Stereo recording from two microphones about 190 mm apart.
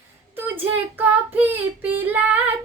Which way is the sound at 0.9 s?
10° right (ahead or behind).